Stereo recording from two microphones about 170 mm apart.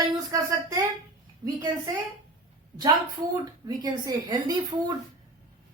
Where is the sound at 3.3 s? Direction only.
25° right (ahead or behind).